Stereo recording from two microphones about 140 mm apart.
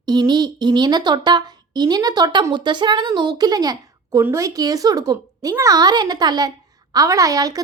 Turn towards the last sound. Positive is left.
turn(degrees=-25)  # may be behind; listen again after turning